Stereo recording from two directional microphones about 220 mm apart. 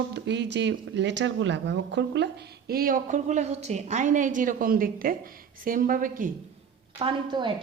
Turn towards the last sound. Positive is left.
turn(degrees=-20)  # may be behind; listen again after turning